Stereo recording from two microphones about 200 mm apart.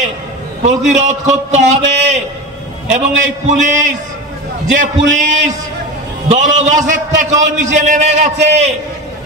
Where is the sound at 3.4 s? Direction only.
35° right (ahead or behind).